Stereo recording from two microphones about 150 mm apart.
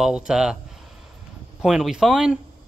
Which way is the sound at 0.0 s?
5° right (ahead or behind).